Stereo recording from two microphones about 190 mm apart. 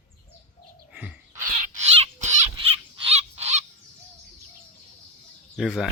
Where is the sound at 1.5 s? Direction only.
35° right (ahead or behind).